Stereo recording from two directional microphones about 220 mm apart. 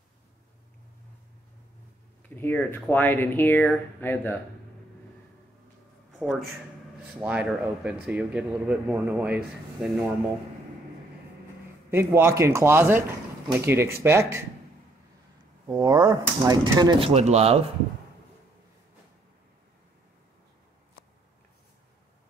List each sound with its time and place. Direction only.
2.2 s speech: 10° left (ahead or behind)
7.2 s speech: 5° right (ahead or behind)
11.9 s speech: 10° right (ahead or behind)
15.6 s speech: 15° right (ahead or behind)
17.1 s speech: 30° right (ahead or behind)